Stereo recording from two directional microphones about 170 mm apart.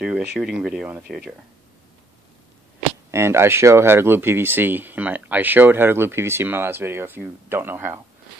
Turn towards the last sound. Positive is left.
turn(degrees=-15)  # may be behind; listen again after turning